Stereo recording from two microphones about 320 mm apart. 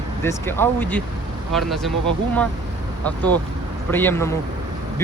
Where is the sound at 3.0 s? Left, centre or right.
Centre.